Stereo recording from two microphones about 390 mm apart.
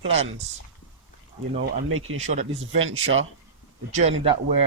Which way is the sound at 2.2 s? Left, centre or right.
Centre.